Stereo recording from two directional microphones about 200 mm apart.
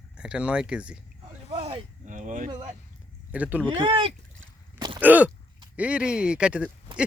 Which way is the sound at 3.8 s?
25° right (ahead or behind).